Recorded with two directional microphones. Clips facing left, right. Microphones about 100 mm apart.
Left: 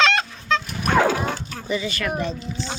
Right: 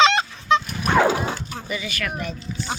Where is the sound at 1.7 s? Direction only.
30° left (ahead or behind).